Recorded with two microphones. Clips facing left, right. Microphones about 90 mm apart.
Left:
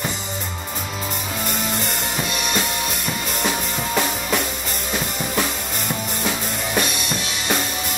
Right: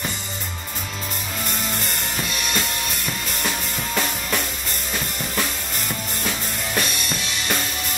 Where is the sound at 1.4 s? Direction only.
Centre (ahead or behind).